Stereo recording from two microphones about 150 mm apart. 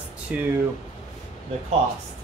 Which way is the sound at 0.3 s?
10° right (ahead or behind).